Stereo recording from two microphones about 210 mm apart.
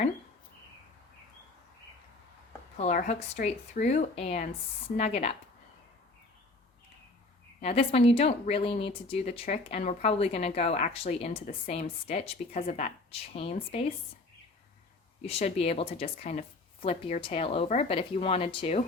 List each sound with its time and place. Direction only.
2.7 s a woman's voice: 35° left (ahead or behind)
7.6 s a woman's voice: 30° left (ahead or behind)
15.2 s a woman's voice: 30° left (ahead or behind)